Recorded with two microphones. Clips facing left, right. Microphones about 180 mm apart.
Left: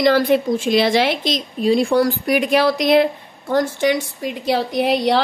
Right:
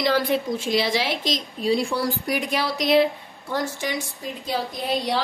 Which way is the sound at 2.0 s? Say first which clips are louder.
Left 8 dB; 80° left.